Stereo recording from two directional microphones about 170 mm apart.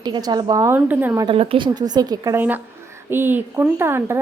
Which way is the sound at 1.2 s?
35° right (ahead or behind).